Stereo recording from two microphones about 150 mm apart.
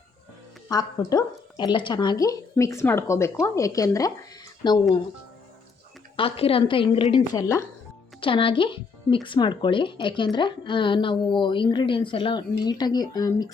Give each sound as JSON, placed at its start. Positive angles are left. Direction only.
{"t": 0.7, "sound": "speech", "side_deg": 25}
{"t": 6.1, "sound": "a woman's voice", "side_deg": 40}
{"t": 7.2, "sound": "speech", "side_deg": 20}
{"t": 8.2, "sound": "a woman's voice", "side_deg": 35}